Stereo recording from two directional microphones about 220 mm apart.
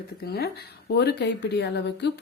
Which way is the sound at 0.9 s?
50° left (ahead or behind).